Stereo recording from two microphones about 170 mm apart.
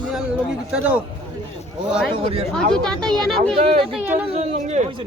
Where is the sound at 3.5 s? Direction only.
30° right (ahead or behind).